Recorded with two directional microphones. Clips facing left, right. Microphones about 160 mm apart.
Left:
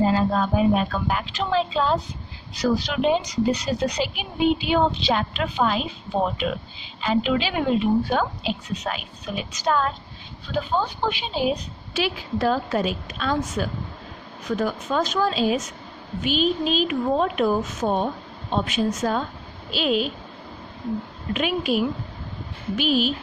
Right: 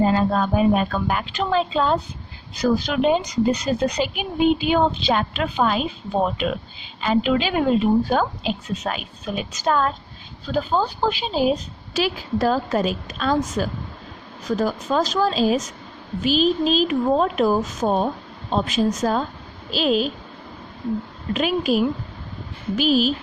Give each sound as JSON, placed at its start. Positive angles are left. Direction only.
{"t": 0.0, "sound": "a woman's voice", "side_deg": -55}
{"t": 7.0, "sound": "a woman's voice", "side_deg": -45}
{"t": 21.3, "sound": "a woman's voice", "side_deg": -40}